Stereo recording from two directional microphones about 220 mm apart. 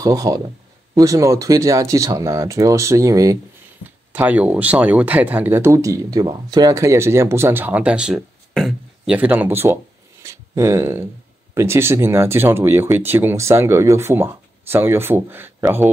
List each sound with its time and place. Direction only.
0.0 s speech: 15° right (ahead or behind)